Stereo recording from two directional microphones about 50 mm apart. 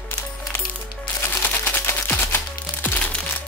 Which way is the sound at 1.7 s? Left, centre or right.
Left.